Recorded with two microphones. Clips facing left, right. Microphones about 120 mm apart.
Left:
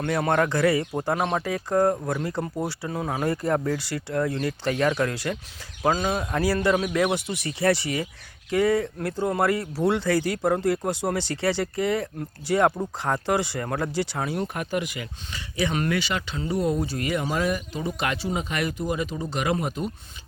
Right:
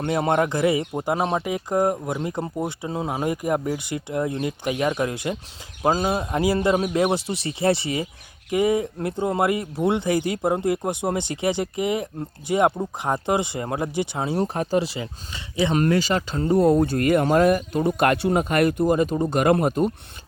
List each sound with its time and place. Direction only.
0.0 s speech: 20° right (ahead or behind)
5.9 s speech: 30° right (ahead or behind)
6.3 s speech: 20° right (ahead or behind); by 19.9 s 50° right (ahead or behind)